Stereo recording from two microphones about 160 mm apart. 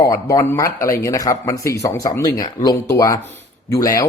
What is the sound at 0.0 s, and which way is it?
Speech, 20° left (ahead or behind).